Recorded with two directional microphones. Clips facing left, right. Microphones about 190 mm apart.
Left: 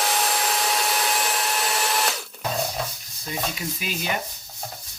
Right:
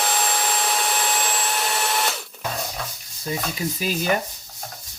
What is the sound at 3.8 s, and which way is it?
Stir, 40° right (ahead or behind).